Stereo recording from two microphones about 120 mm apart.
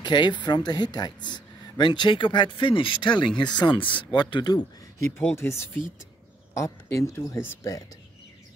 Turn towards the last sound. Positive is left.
turn(degrees=25)  # may be behind; listen again after turning